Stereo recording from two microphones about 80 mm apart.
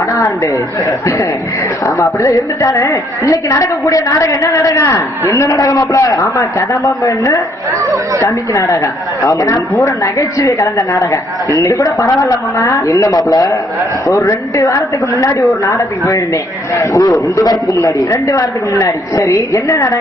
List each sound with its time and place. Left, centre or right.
2.0 s a woman's voice: left